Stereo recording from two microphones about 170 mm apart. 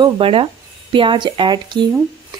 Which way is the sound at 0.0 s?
35° right (ahead or behind).